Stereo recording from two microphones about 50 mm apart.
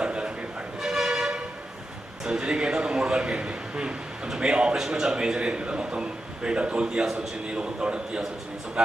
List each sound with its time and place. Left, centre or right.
0.0 s a sound: right
0.8 s toot: centre
2.2 s a man's voice: centre